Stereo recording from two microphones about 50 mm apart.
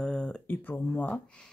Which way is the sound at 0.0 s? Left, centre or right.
Centre.